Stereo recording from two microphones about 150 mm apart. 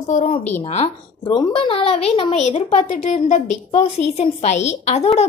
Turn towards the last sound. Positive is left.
turn(degrees=45)  # may be behind; listen again after turning